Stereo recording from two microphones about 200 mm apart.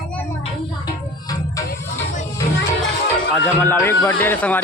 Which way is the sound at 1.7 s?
50° left (ahead or behind).